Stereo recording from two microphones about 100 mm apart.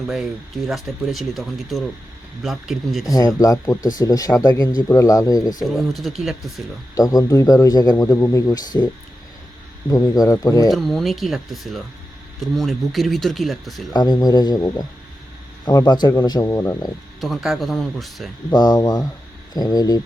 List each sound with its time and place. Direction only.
0.7 s speech: centre (ahead or behind)
3.1 s a man's voice: 35° left (ahead or behind)
5.6 s speech: centre (ahead or behind)
6.9 s a man's voice: 35° left (ahead or behind)
8.6 s speech: 40° left (ahead or behind)
9.9 s a man's voice: 40° left (ahead or behind)
10.7 s speech: 5° left (ahead or behind)
13.9 s a man's voice: 45° left (ahead or behind)
17.2 s speech: centre (ahead or behind)
18.5 s a man's voice: 40° left (ahead or behind)